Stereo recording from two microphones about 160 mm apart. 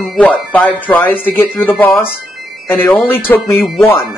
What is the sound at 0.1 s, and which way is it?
Speech, 10° left (ahead or behind).